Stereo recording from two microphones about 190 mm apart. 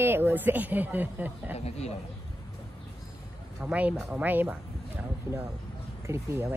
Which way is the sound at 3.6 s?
5° right (ahead or behind).